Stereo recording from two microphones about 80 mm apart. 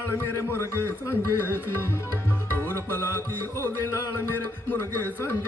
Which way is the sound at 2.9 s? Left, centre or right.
Left.